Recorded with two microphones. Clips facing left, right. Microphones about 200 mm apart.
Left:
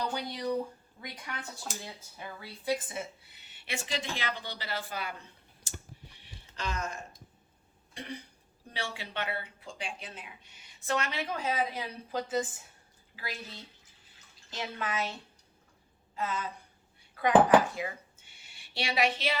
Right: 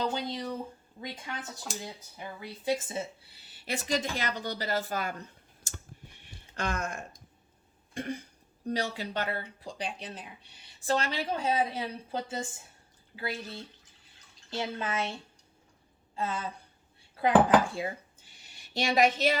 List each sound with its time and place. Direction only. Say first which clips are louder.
0.0 s speech: right 2 dB; 20° right (ahead or behind); by 5.2 s 45° right (ahead or behind)
5.6 s clicking: even; 50° right (ahead or behind)
7.9 s throat clearing: right 6 dB; 45° right (ahead or behind)
8.7 s speech: right 6 dB; 40° right (ahead or behind)
14.5 s speech: right 3 dB; 30° right (ahead or behind)
16.1 s speech: right 1 dB; 30° right (ahead or behind)